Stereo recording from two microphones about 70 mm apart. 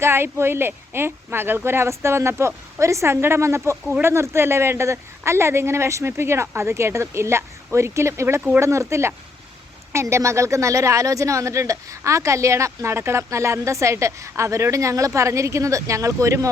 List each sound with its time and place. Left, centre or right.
0.0 s speech: right